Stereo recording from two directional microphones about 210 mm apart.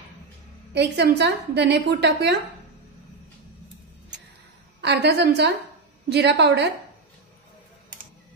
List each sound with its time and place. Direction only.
0.7 s a woman's voice: 55° right (ahead or behind)
4.8 s a woman's voice: 55° right (ahead or behind)